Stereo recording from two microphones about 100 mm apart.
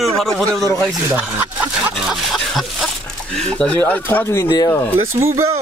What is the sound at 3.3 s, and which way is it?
Speech, 10° left (ahead or behind).